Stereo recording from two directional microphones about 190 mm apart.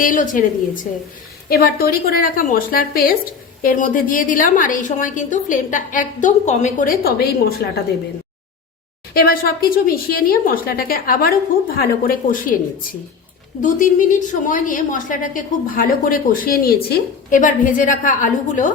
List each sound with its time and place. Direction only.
0.0 s a woman's voice: 45° left (ahead or behind)
1.5 s a woman's voice: 50° left (ahead or behind)
9.1 s a woman's voice: 50° left (ahead or behind)